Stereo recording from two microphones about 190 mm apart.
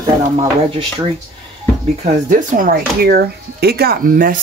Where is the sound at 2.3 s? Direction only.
45° right (ahead or behind).